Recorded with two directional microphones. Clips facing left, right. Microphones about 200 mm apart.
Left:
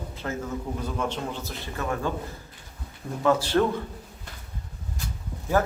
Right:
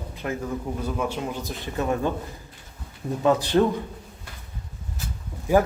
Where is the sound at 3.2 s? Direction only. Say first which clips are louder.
Right 2 dB; 20° right (ahead or behind).